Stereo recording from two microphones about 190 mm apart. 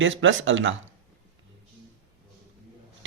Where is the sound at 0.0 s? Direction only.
90° right.